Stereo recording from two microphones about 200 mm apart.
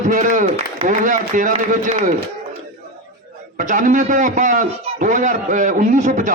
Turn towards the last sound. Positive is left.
turn(degrees=-40)  # may be behind; listen again after turning